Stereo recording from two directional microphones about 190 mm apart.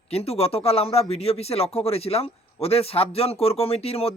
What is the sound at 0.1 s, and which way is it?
Speech, 30° left (ahead or behind).